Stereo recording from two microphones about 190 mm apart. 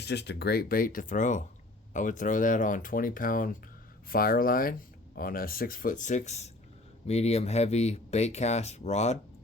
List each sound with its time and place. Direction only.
0.0 s speech: 60° left (ahead or behind); by 9.1 s 35° left (ahead or behind)